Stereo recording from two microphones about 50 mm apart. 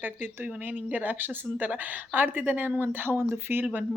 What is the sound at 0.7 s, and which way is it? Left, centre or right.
A woman's voice, right.